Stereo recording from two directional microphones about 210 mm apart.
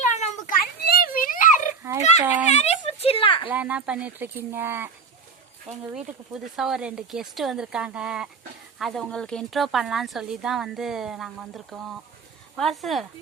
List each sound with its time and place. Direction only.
0.1 s children playing: 35° left (ahead or behind)
1.8 s fowl: 10° right (ahead or behind)
2.6 s a sound: 30° left (ahead or behind)
3.5 s speech: 5° right (ahead or behind)